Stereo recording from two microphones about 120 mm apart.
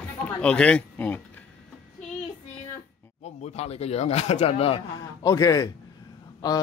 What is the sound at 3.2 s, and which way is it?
Speech, 65° left (ahead or behind).